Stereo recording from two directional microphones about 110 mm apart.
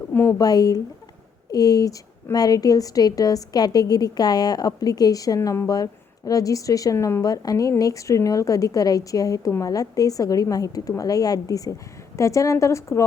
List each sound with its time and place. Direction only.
0.1 s speech: 20° left (ahead or behind)
0.3 s a woman's voice: 35° left (ahead or behind)